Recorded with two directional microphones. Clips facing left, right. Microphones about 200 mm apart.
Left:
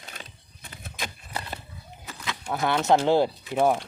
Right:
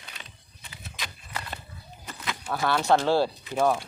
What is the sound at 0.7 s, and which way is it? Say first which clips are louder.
Vehicle: left 4 dB; 50° left (ahead or behind).